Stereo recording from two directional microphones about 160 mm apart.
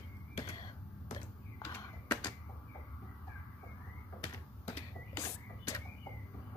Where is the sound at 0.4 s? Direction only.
30° left (ahead or behind).